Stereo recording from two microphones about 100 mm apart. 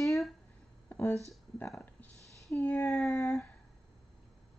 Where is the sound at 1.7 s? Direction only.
5° left (ahead or behind).